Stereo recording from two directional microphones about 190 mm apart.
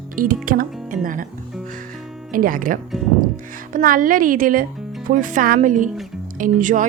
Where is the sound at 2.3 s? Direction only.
45° right (ahead or behind).